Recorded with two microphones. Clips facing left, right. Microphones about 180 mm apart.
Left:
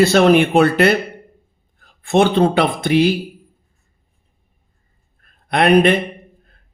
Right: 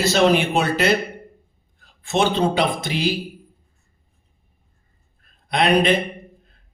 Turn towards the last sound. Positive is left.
turn(degrees=55)  # may be behind; listen again after turning